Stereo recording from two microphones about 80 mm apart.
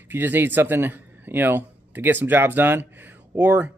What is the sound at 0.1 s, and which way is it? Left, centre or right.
Speech, right.